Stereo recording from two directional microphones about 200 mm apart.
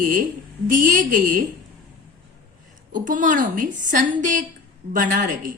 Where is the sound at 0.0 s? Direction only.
40° right (ahead or behind).